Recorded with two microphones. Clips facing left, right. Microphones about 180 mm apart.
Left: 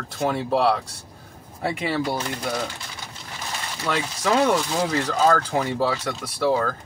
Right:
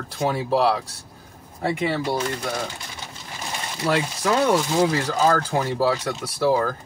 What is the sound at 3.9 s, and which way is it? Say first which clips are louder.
Speech: right 4 dB; 30° right (ahead or behind).